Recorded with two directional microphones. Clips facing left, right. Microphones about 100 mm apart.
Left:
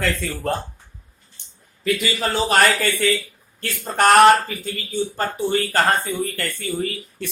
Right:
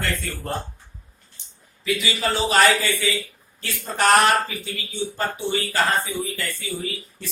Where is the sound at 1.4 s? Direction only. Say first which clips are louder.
Even; 60° left (ahead or behind).